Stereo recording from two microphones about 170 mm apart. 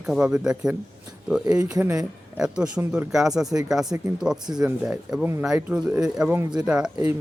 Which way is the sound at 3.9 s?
20° right (ahead or behind).